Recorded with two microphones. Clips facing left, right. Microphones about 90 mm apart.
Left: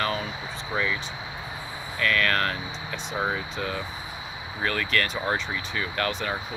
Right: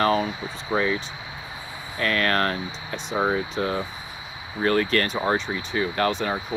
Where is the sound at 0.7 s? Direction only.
35° right (ahead or behind).